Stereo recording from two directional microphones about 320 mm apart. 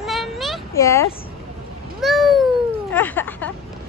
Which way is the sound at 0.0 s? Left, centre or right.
Centre.